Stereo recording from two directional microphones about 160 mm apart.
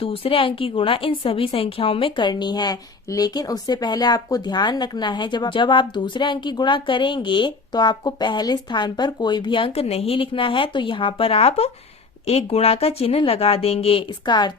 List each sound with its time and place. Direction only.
0.0 s a woman's voice: 35° left (ahead or behind)